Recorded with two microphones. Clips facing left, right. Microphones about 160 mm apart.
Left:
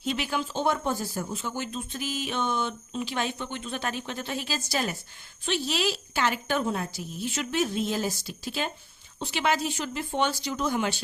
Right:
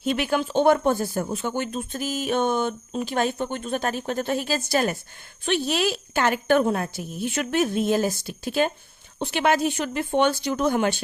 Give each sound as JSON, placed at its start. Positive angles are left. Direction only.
{"t": 0.0, "sound": "speech", "side_deg": -55}